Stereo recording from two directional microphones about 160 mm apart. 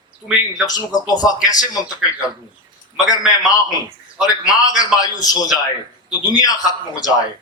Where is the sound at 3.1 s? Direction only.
20° left (ahead or behind).